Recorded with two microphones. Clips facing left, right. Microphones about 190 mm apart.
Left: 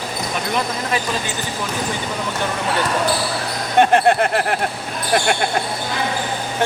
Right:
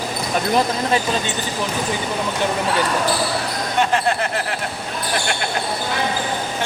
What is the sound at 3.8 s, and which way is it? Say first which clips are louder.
Speech: left 6 dB; 55° left (ahead or behind).